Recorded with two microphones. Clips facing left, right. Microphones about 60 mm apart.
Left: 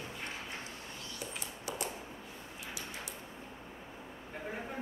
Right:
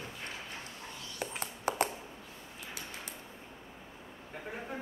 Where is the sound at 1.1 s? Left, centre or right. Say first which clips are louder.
Right 6 dB; right.